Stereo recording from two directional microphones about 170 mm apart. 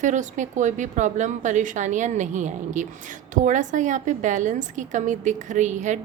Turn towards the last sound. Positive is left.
turn(degrees=-45)  # may be behind; listen again after turning